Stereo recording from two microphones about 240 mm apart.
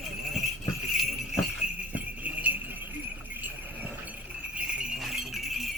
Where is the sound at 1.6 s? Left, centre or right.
Centre.